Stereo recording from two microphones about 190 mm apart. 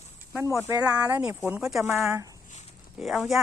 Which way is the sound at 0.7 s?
20° right (ahead or behind).